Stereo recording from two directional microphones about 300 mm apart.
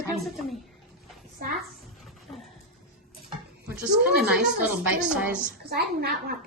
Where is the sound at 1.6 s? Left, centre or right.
Centre.